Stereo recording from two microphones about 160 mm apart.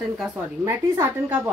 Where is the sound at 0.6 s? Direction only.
15° right (ahead or behind).